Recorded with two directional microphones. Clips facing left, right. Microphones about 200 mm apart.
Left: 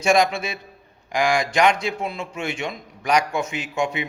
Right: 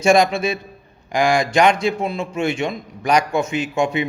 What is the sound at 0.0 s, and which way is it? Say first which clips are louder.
A man's voice: right 4 dB; 30° right (ahead or behind).